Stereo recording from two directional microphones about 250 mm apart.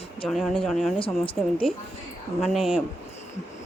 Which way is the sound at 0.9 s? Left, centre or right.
Left.